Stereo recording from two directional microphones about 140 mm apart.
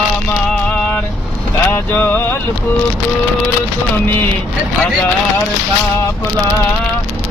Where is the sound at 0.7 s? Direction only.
10° left (ahead or behind).